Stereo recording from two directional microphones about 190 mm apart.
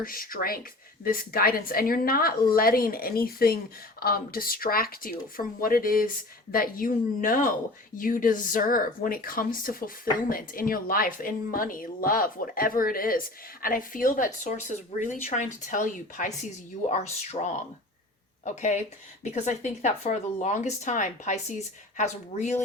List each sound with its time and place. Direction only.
0.0 s a woman's voice: 50° left (ahead or behind)